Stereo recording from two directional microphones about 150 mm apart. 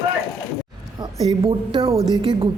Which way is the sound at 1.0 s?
35° right (ahead or behind).